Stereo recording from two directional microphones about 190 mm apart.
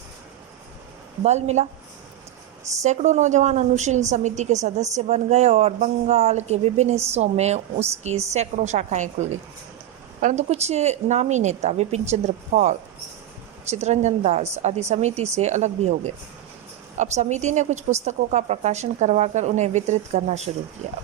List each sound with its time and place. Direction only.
1.2 s a woman's voice: 35° right (ahead or behind)
2.8 s a woman's voice: 40° right (ahead or behind)